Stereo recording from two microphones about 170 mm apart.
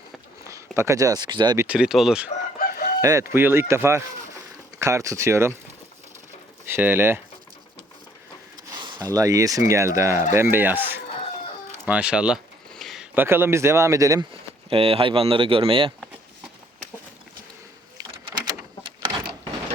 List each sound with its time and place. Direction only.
0.4 s speech: 15° right (ahead or behind)
1.5 s speech: 10° right (ahead or behind)
2.6 s chicken: 60° left (ahead or behind)
3.0 s speech: 20° right (ahead or behind)
6.7 s speech: 10° right (ahead or behind)
8.7 s a sound: 25° right (ahead or behind)
9.1 s speech: 20° right (ahead or behind)
11.9 s a sound: 5° right (ahead or behind)
13.1 s speech: 15° right (ahead or behind)
14.7 s speech: 35° right (ahead or behind)
18.4 s a sound: 30° right (ahead or behind)